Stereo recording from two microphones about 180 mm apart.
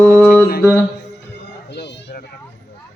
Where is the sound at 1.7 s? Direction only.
70° left (ahead or behind).